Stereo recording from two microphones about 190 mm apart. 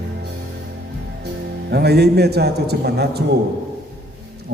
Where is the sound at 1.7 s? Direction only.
60° right (ahead or behind).